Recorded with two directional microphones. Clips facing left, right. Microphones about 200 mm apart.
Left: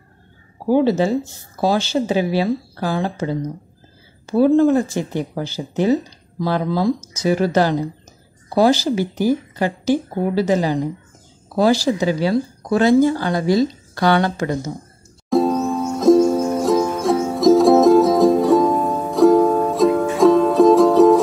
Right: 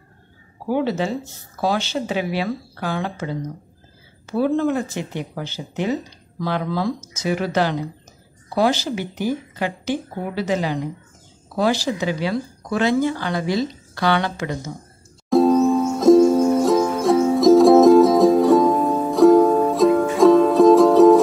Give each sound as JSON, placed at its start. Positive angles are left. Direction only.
{"t": 0.7, "sound": "speech", "side_deg": 35}
{"t": 15.2, "sound": "music", "side_deg": 0}